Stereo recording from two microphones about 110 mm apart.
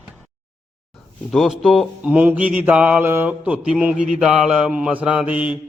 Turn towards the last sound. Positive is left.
turn(degrees=55)  # may be behind; listen again after turning